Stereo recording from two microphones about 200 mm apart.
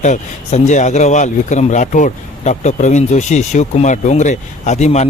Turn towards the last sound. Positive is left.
turn(degrees=35)  # may be behind; listen again after turning